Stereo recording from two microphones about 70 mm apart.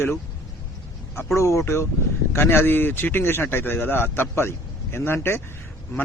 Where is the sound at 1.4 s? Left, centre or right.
Left.